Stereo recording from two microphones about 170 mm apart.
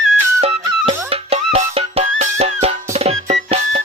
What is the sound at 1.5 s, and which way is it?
Music, 35° right (ahead or behind).